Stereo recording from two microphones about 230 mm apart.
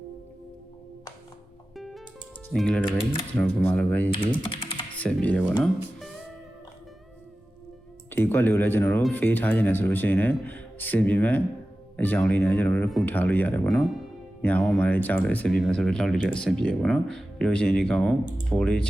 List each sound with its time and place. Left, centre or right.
1.7 s music: centre
2.5 s speech: centre
4.1 s speech: left
4.9 s speech: centre
5.6 s music: centre
8.1 s speech: centre